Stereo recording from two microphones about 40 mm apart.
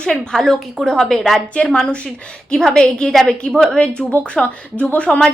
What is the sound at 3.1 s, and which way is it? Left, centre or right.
Speech, centre.